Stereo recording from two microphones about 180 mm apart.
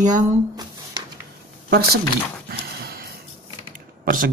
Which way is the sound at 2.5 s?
55° right (ahead or behind).